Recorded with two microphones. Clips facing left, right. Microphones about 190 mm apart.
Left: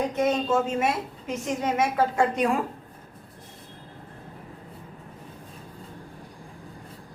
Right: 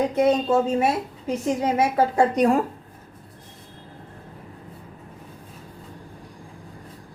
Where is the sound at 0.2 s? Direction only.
35° right (ahead or behind).